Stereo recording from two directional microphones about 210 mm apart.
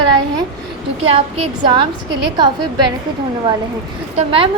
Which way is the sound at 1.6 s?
20° right (ahead or behind).